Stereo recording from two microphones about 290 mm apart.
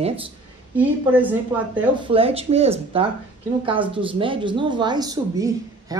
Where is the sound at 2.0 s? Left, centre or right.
Centre.